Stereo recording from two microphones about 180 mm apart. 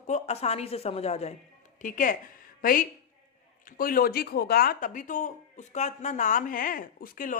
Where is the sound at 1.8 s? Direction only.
45° left (ahead or behind).